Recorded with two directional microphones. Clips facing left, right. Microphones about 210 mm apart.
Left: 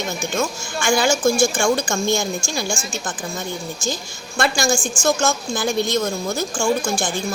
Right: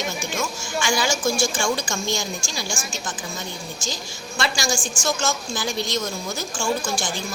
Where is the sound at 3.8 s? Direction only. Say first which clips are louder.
Left 5 dB; 50° left (ahead or behind).